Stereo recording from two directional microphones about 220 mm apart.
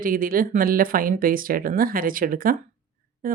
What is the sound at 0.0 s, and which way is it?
Speech, 40° right (ahead or behind).